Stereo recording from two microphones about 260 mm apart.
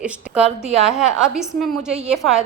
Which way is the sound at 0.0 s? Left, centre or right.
Centre.